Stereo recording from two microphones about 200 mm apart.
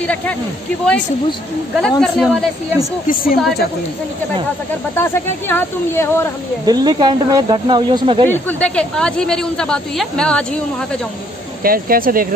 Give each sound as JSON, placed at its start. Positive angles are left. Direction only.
{"t": 0.0, "sound": "speech", "side_deg": 5}
{"t": 1.8, "sound": "speech", "side_deg": 5}
{"t": 3.1, "sound": "a woman's voice", "side_deg": 45}
{"t": 4.9, "sound": "speech", "side_deg": 10}
{"t": 6.6, "sound": "speech", "side_deg": -20}
{"t": 8.3, "sound": "speech", "side_deg": 10}
{"t": 11.6, "sound": "speech", "side_deg": -45}